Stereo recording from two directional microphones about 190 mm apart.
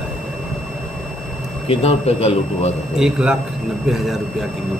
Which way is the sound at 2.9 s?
5° right (ahead or behind).